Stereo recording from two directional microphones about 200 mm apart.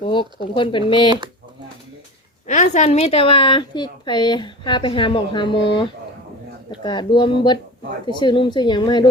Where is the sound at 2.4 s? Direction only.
35° left (ahead or behind).